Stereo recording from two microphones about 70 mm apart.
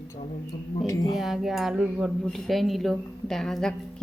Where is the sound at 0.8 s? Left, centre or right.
Left.